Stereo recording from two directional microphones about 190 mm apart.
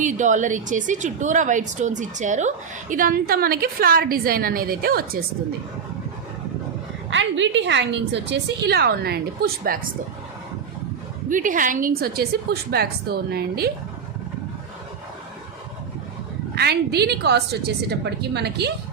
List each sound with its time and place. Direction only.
0.0 s a woman's voice: 40° right (ahead or behind)
7.1 s a woman's voice: 75° right (ahead or behind); by 9.7 s 55° right (ahead or behind)
11.3 s a woman's voice: 45° right (ahead or behind)
16.6 s a woman's voice: 60° right (ahead or behind)